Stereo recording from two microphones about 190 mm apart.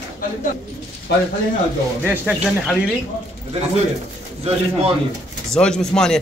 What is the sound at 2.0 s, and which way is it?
Speech, 5° right (ahead or behind).